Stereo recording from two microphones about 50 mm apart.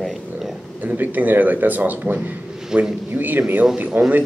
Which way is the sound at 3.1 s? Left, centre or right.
Right.